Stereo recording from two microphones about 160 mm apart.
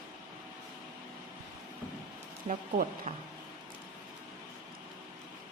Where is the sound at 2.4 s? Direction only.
45° right (ahead or behind).